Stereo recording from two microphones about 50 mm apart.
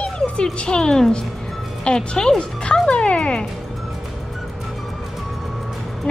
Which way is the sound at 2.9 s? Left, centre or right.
Left.